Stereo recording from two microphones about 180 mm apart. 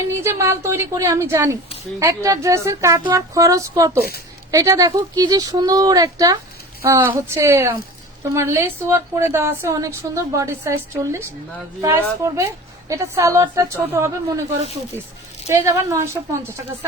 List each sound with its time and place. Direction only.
0.1 s speech: 15° right (ahead or behind)
15.4 s speech: 15° right (ahead or behind)